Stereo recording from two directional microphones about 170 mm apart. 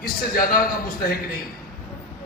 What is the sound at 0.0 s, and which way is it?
A man's voice, 60° left (ahead or behind).